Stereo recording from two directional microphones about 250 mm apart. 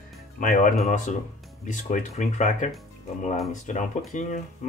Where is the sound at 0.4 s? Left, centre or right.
Left.